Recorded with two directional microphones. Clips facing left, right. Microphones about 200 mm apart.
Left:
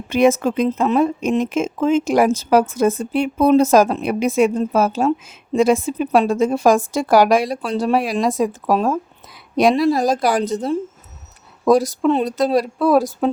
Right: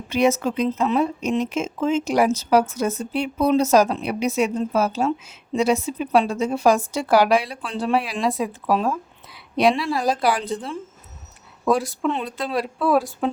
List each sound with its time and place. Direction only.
0.1 s a woman's voice: 55° left (ahead or behind)